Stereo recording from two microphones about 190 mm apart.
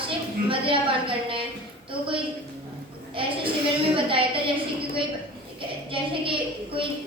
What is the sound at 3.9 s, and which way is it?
A woman's voice, 30° right (ahead or behind).